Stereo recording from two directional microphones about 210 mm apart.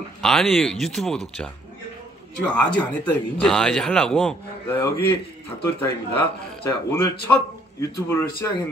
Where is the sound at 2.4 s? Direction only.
5° left (ahead or behind).